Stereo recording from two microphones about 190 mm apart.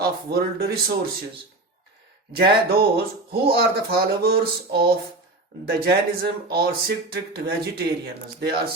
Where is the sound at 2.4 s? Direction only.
55° right (ahead or behind).